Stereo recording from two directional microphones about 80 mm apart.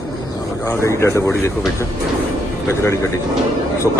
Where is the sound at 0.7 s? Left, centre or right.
Left.